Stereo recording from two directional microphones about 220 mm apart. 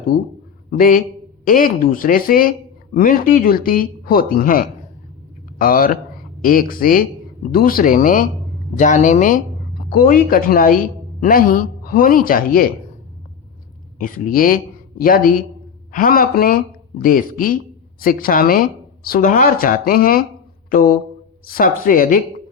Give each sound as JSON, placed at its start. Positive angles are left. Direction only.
{"t": 0.7, "sound": "speech", "side_deg": 40}
{"t": 14.0, "sound": "speech", "side_deg": 40}
{"t": 20.7, "sound": "a sound", "side_deg": 40}
{"t": 21.4, "sound": "speech", "side_deg": 40}